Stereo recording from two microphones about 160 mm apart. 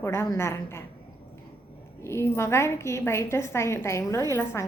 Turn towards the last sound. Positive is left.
turn(degrees=15)  # may be behind; listen again after turning